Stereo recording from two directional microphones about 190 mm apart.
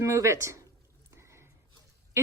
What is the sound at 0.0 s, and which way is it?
Speech, 15° right (ahead or behind).